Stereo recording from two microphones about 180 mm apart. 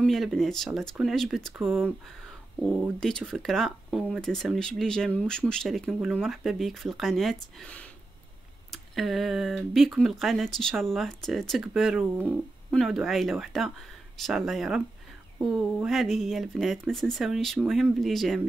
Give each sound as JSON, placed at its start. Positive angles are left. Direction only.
{"t": 0.0, "sound": "speech", "side_deg": 0}
{"t": 2.6, "sound": "speech", "side_deg": 5}